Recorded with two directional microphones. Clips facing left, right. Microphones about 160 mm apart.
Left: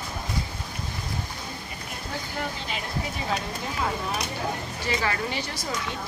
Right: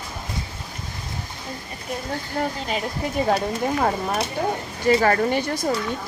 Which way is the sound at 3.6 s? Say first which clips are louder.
Right 7 dB; 50° right (ahead or behind).